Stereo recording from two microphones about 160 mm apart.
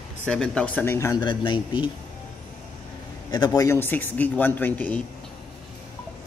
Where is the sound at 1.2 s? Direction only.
30° left (ahead or behind).